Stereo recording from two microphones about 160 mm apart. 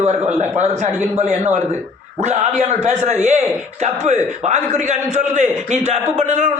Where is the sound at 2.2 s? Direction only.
45° right (ahead or behind).